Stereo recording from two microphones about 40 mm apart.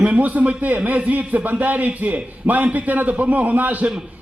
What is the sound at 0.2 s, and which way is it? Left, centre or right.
A man's voice, right.